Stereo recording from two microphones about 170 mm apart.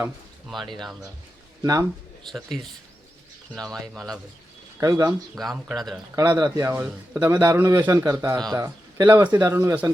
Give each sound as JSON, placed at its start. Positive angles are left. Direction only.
{"t": 0.4, "sound": "speech", "side_deg": 0}
{"t": 1.6, "sound": "speech", "side_deg": -20}
{"t": 2.3, "sound": "speech", "side_deg": 0}
{"t": 3.5, "sound": "speech", "side_deg": 0}
{"t": 4.8, "sound": "speech", "side_deg": -20}
{"t": 5.3, "sound": "speech", "side_deg": 0}
{"t": 6.1, "sound": "a man's voice", "side_deg": -20}